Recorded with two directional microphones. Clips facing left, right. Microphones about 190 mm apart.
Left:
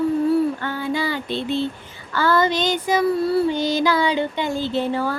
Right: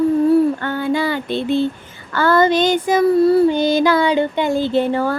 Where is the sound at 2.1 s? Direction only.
55° right (ahead or behind).